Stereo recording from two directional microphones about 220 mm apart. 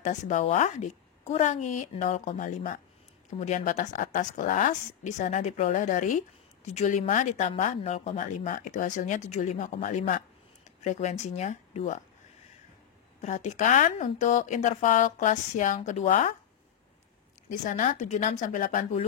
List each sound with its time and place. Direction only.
0.0 s speech: 35° left (ahead or behind)
13.2 s speech: 30° left (ahead or behind)
17.5 s speech: 35° left (ahead or behind)